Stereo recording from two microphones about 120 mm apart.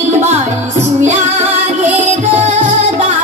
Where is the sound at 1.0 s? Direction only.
75° right (ahead or behind).